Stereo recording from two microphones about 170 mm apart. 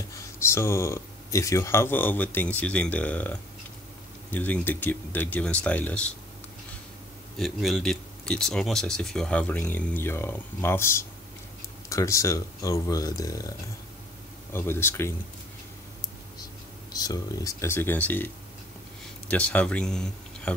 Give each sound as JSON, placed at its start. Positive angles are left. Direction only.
{"t": 0.1, "sound": "speech", "side_deg": 15}
{"t": 7.3, "sound": "speech", "side_deg": 0}
{"t": 16.9, "sound": "speech", "side_deg": 20}